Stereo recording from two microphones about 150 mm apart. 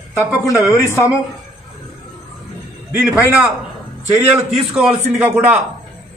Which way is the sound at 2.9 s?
10° right (ahead or behind).